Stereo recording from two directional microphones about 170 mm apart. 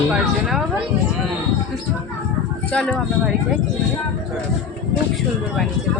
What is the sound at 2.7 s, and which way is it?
Speech, 5° left (ahead or behind).